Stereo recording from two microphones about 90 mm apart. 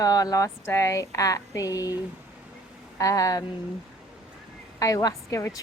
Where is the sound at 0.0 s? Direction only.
45° left (ahead or behind).